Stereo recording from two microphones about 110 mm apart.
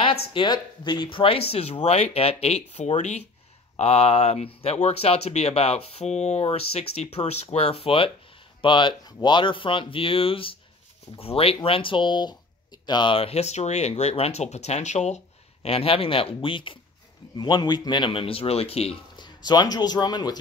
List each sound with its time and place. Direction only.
0.0 s speech: 50° left (ahead or behind); by 3.3 s 85° left
3.7 s speech: 65° left (ahead or behind)
8.5 s speech: 45° left (ahead or behind); by 15.1 s 90° left
15.6 s speech: 60° left (ahead or behind)
17.4 s speech: 40° left (ahead or behind); by 18.9 s 65° left (ahead or behind)
19.1 s speech: 40° left (ahead or behind)